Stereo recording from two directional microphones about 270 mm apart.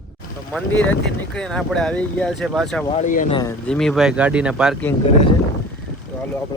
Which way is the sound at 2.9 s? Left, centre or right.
Left.